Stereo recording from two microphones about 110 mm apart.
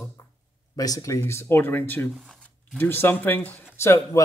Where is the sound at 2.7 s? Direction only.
20° left (ahead or behind).